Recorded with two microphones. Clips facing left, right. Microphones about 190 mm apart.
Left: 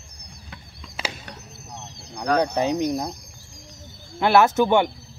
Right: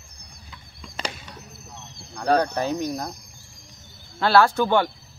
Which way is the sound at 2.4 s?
20° left (ahead or behind).